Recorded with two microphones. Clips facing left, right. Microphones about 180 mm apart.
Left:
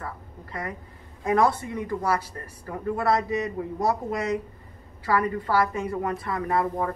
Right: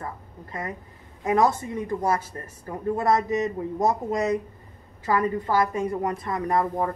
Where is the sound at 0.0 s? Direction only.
25° right (ahead or behind).